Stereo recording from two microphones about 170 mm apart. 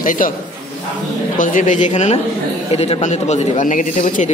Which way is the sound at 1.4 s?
50° left (ahead or behind).